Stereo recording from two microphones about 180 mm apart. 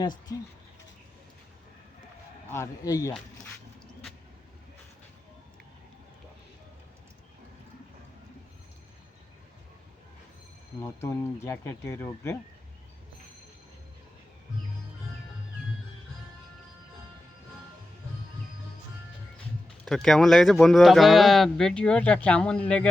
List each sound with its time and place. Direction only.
0.0 s a man's voice: 25° left (ahead or behind)
2.5 s a man's voice: 15° left (ahead or behind)
10.8 s speech: 15° left (ahead or behind)
19.8 s speech: 5° left (ahead or behind)